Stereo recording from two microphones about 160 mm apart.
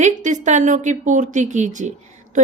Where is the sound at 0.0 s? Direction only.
50° right (ahead or behind).